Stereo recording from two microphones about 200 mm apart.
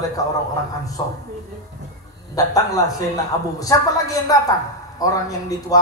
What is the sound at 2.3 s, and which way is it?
A man's voice, 15° left (ahead or behind).